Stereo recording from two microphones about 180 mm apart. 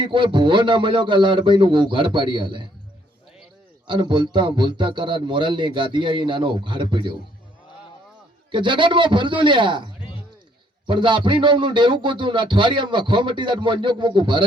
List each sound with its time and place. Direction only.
0.0 s speech: 25° right (ahead or behind)
3.8 s speech: 25° right (ahead or behind)
8.5 s speech: 25° right (ahead or behind)